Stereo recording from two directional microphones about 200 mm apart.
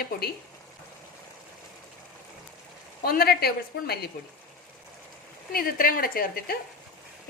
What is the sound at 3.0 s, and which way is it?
A woman's voice, 50° left (ahead or behind).